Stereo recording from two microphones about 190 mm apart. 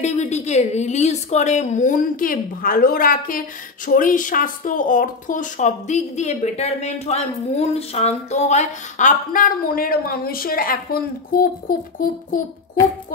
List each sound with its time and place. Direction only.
0.0 s a woman's voice: 35° left (ahead or behind)